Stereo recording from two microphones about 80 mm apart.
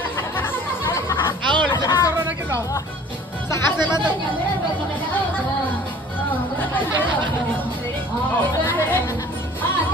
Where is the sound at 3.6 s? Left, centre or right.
Right.